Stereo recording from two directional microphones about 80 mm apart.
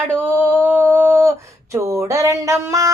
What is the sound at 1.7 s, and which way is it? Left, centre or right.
A child's voice, right.